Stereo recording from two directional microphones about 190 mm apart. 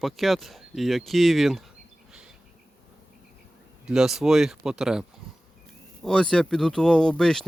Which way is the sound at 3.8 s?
Centre (ahead or behind).